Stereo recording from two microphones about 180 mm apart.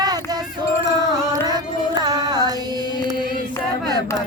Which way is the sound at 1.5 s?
20° right (ahead or behind).